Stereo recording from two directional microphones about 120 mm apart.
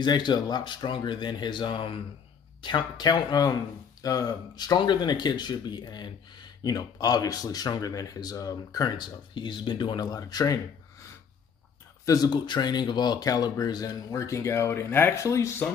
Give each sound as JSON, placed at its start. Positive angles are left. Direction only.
{"t": 0.0, "sound": "speech", "side_deg": 40}
{"t": 12.1, "sound": "speech", "side_deg": 35}